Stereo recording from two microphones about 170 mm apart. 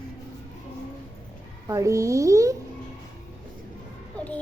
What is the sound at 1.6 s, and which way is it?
Speech, 15° right (ahead or behind).